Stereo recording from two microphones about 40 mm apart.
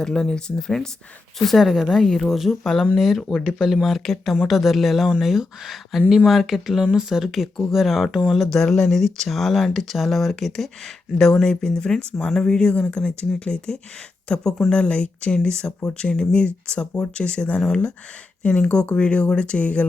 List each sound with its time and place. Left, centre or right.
0.0 s speech: centre
1.5 s speech: centre
2.3 s speech: centre
3.9 s speech: centre
8.4 s speech: centre
14.7 s speech: left